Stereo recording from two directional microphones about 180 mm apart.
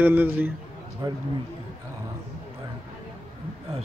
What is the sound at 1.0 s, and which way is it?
Speech, 25° right (ahead or behind).